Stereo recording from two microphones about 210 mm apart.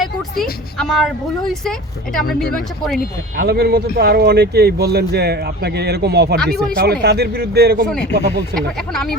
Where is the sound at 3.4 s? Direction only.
50° right (ahead or behind).